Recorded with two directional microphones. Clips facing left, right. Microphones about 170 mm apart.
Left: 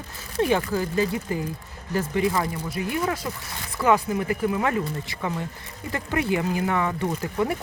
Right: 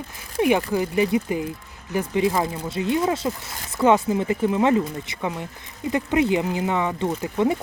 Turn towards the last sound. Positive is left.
turn(degrees=-20)  # may be behind; listen again after turning